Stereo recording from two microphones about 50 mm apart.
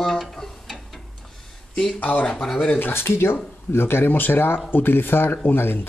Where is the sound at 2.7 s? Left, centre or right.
Left.